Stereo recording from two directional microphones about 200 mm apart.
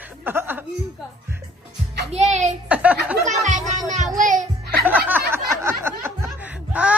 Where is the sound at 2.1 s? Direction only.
35° right (ahead or behind).